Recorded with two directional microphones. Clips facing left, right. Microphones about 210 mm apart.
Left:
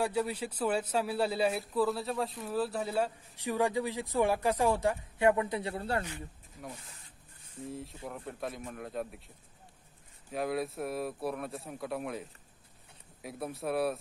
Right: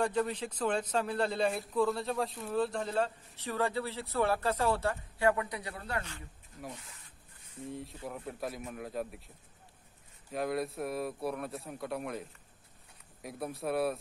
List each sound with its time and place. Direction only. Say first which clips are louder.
0.0 s a man's voice: even; 10° left (ahead or behind); by 6.0 s 30° left (ahead or behind)
7.6 s speech: even; centre (ahead or behind)
10.3 s speech: even; centre (ahead or behind)